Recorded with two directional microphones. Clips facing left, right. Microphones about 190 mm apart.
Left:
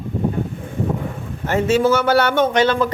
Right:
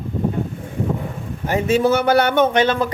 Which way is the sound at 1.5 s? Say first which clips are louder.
Left 1 dB; 15° right (ahead or behind).